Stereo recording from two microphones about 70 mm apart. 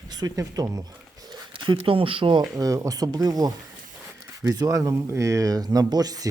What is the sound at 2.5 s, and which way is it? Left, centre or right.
Speech, right.